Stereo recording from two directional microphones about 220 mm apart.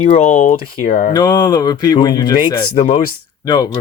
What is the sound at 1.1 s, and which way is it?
Speech, 15° left (ahead or behind).